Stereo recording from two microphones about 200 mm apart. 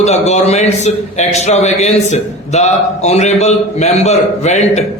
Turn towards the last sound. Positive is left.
turn(degrees=35)  # may be behind; listen again after turning